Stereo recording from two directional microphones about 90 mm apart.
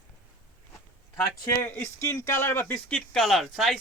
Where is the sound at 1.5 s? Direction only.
25° left (ahead or behind).